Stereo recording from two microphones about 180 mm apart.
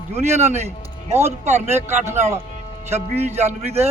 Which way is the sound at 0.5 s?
35° right (ahead or behind).